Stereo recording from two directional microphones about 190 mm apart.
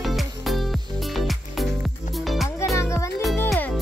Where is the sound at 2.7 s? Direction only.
15° left (ahead or behind).